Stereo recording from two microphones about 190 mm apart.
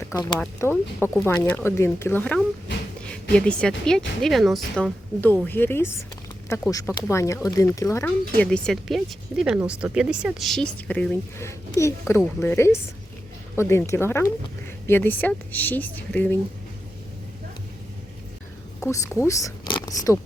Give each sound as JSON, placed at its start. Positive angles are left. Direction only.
{"t": 0.0, "sound": "speech", "side_deg": 20}
{"t": 0.3, "sound": "speech", "side_deg": 5}
{"t": 8.4, "sound": "speech", "side_deg": 5}
{"t": 18.8, "sound": "speech", "side_deg": 15}